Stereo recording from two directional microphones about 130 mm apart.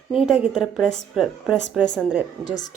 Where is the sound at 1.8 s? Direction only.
5° left (ahead or behind).